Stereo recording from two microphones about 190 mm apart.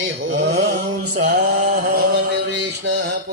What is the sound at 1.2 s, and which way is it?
Mantra, 40° right (ahead or behind).